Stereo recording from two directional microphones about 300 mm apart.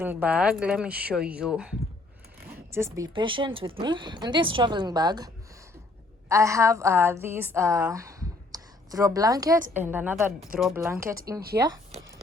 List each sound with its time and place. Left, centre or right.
0.0 s speech: centre
2.7 s a woman's voice: centre